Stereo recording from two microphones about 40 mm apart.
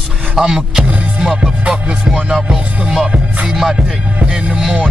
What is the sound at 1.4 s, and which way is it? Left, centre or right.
Music, right.